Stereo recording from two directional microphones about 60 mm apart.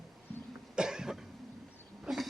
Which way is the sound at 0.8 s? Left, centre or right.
Centre.